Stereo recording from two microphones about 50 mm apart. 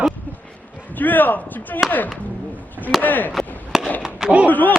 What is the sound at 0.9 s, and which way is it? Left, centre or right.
Speech, left.